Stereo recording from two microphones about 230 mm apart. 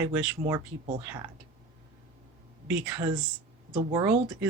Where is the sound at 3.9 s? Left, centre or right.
Centre.